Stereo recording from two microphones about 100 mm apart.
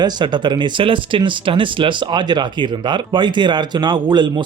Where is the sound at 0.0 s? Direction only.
50° right (ahead or behind).